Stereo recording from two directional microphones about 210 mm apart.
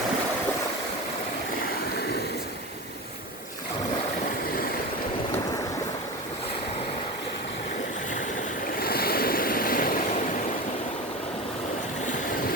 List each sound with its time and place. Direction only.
8.8 s waves: 45° left (ahead or behind)